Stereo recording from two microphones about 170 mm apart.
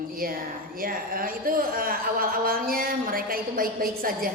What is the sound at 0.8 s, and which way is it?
Speech, 55° right (ahead or behind).